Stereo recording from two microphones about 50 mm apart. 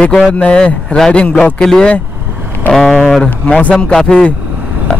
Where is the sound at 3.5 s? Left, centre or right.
Left.